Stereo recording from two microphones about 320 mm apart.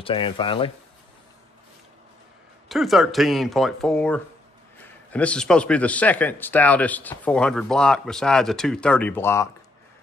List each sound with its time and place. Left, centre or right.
0.0 s speech: centre
2.7 s a man's voice: centre